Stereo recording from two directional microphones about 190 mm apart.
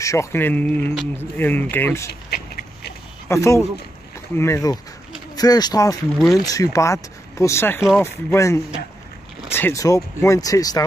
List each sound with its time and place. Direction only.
0.0 s speech: 15° left (ahead or behind)
2.3 s a sound: 55° left (ahead or behind)
3.3 s speech: 15° left (ahead or behind)
6.1 s speech: centre (ahead or behind)
6.4 s speech: 20° left (ahead or behind)